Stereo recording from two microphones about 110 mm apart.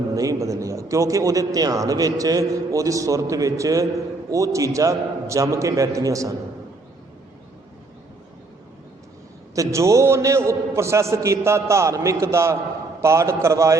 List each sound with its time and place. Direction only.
0.1 s a man's voice: 30° right (ahead or behind)
9.6 s a man's voice: 25° right (ahead or behind)